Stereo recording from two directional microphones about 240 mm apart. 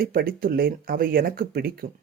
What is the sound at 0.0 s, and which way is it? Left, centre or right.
Speech, right.